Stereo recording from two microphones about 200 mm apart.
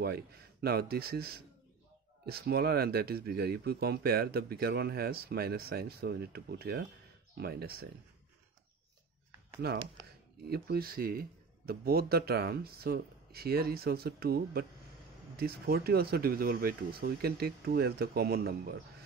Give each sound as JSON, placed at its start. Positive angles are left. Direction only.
{"t": 0.0, "sound": "speech", "side_deg": -55}
{"t": 9.6, "sound": "speech", "side_deg": -50}